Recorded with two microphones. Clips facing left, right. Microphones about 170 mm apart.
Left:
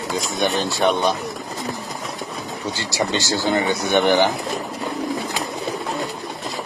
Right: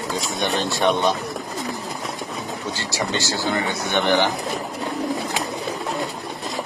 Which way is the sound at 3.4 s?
20° left (ahead or behind).